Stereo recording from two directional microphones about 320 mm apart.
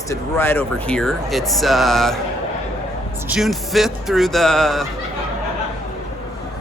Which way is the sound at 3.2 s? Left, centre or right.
Centre.